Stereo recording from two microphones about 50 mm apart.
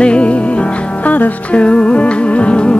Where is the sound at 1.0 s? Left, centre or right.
Left.